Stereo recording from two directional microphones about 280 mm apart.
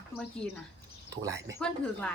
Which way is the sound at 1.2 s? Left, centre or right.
Centre.